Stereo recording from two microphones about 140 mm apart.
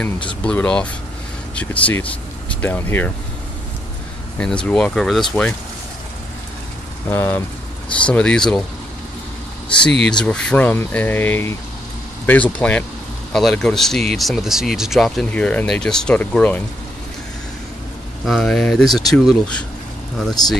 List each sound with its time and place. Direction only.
0.4 s speech: 10° left (ahead or behind)
4.4 s speech: 5° left (ahead or behind)
7.1 s speech: 15° left (ahead or behind)
9.8 s speech: 5° left (ahead or behind)
18.2 s speech: centre (ahead or behind)